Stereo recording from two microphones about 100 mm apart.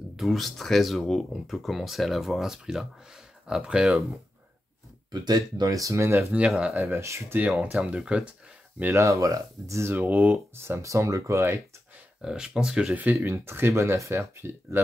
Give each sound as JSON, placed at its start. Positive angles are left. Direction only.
{"t": 0.1, "sound": "speech", "side_deg": 0}
{"t": 5.1, "sound": "speech", "side_deg": -45}
{"t": 6.3, "sound": "speech", "side_deg": -10}
{"t": 6.8, "sound": "speech", "side_deg": -25}
{"t": 7.7, "sound": "speech", "side_deg": -10}
{"t": 8.9, "sound": "speech", "side_deg": -30}
{"t": 12.2, "sound": "speech", "side_deg": -5}
{"t": 12.9, "sound": "speech", "side_deg": -15}